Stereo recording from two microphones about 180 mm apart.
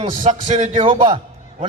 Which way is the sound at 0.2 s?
40° right (ahead or behind).